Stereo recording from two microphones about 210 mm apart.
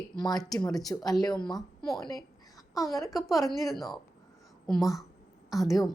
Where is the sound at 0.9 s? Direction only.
15° left (ahead or behind).